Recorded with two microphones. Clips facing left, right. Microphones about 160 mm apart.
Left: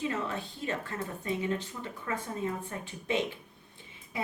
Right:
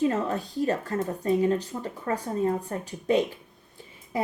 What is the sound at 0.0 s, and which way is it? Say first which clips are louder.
Speech: right 8 dB; 40° right (ahead or behind).